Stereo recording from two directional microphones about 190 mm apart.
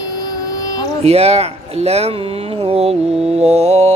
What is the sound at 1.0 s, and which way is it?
Mantra, 35° right (ahead or behind).